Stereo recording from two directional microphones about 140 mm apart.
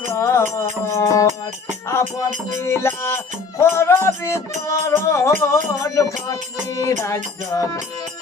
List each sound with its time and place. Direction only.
0.2 s music: 20° left (ahead or behind)
1.9 s speech: 20° left (ahead or behind)